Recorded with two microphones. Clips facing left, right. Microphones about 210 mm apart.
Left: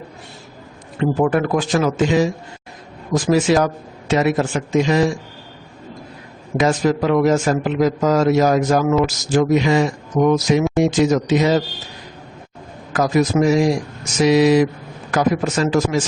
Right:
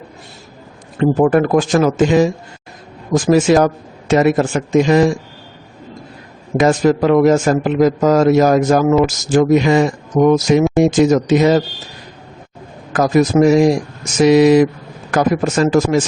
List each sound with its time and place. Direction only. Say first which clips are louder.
0.9 s a man's voice: right 5 dB; 45° right (ahead or behind)
6.6 s a man's voice: right 4 dB; 50° right (ahead or behind)
12.9 s a man's voice: right 4 dB; 50° right (ahead or behind)